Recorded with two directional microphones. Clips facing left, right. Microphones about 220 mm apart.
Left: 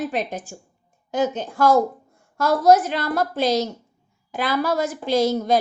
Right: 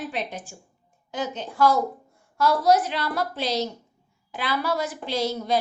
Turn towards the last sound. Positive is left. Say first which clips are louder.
# left 6 dB
turn(degrees=45)  # may be behind; listen again after turning